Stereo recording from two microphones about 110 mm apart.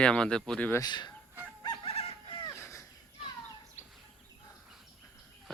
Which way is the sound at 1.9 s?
60° left (ahead or behind).